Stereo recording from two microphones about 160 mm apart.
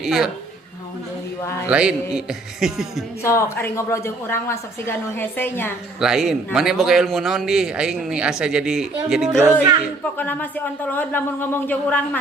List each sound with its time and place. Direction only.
0.0 s a man's voice: 5° right (ahead or behind)
1.6 s a man's voice: 5° right (ahead or behind)
3.2 s a woman's voice: 15° left (ahead or behind)
6.0 s a man's voice: 5° right (ahead or behind)
10.0 s a woman's voice: 10° left (ahead or behind)